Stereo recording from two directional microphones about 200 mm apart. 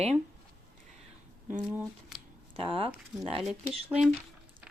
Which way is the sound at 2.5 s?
25° right (ahead or behind).